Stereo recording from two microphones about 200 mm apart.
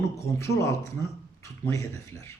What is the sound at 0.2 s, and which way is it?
Speech, 15° left (ahead or behind).